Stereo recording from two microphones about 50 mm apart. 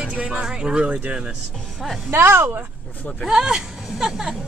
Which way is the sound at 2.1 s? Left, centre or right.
Right.